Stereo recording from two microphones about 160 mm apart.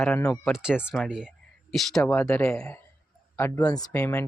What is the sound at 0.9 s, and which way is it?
Speech, 5° right (ahead or behind).